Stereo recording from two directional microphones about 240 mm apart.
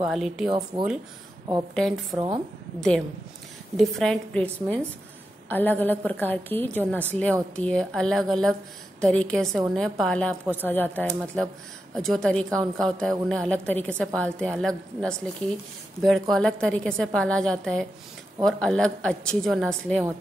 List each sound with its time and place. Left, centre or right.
0.1 s a woman's voice: centre
0.5 s speech: centre
1.8 s a woman's voice: centre
2.1 s speech: right
3.7 s a woman's voice: centre